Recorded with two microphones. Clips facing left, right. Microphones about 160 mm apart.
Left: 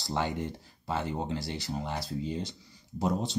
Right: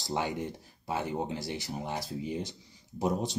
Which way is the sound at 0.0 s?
20° right (ahead or behind).